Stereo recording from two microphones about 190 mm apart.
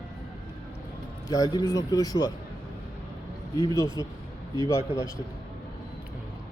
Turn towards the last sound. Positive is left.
turn(degrees=15)  # may be behind; listen again after turning